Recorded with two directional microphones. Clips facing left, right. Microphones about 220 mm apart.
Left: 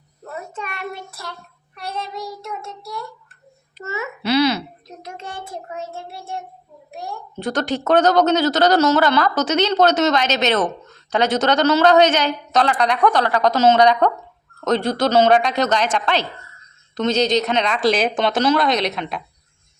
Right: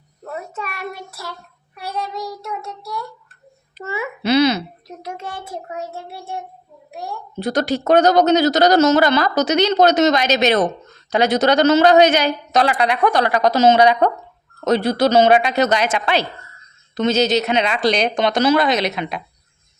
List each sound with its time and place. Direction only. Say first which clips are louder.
0.6 s speech: right 1 dB; 5° right (ahead or behind)
2.4 s speech: right 2 dB; centre (ahead or behind)
3.8 s a child's voice: right 3 dB; 10° right (ahead or behind)
5.1 s speech: even; 5° right (ahead or behind)
7.5 s speech: right 2 dB; 10° right (ahead or behind)